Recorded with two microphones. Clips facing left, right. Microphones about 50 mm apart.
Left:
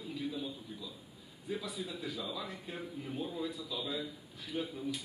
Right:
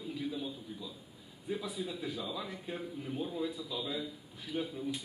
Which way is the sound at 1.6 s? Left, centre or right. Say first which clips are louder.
Right 2 dB; centre.